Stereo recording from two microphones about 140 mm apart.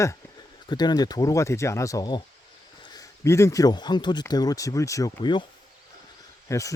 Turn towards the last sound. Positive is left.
turn(degrees=25)  # may be behind; listen again after turning